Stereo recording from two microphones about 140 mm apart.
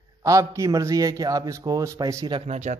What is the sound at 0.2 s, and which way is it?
Speech, 25° right (ahead or behind).